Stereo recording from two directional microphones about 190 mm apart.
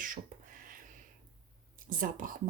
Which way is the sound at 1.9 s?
45° right (ahead or behind).